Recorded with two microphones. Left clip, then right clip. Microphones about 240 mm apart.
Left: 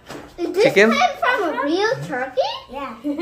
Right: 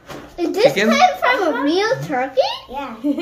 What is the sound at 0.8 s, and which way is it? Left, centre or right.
Speech, centre.